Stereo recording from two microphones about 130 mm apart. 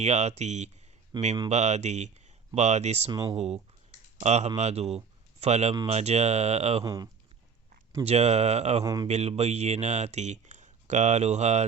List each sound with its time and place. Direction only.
0.0 s speech: 60° right (ahead or behind)
1.1 s speech: 35° right (ahead or behind)
1.5 s speech: 60° right (ahead or behind)
3.1 s speech: 30° right (ahead or behind)
3.3 s speech: 50° right (ahead or behind)
6.8 s speech: 30° right (ahead or behind)
8.0 s speech: 55° right (ahead or behind)
8.8 s speech: 30° right (ahead or behind)
9.0 s speech: 55° right (ahead or behind)